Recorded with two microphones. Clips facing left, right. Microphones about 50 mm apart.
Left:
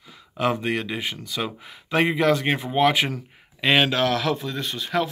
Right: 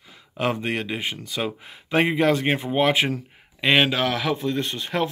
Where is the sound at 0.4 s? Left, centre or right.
Centre.